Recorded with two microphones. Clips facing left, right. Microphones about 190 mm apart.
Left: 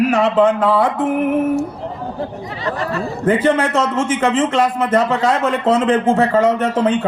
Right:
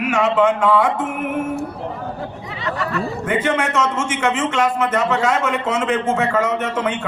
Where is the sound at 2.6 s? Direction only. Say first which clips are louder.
Left 1 dB; 35° left (ahead or behind).